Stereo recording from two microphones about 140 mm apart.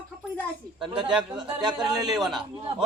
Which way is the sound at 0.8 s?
35° right (ahead or behind).